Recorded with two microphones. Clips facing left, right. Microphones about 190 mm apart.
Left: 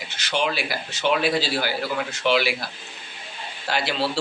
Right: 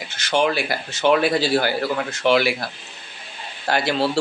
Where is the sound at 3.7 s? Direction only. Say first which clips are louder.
Right 5 dB; 50° right (ahead or behind).